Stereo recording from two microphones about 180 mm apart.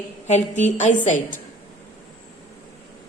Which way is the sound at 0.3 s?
40° left (ahead or behind).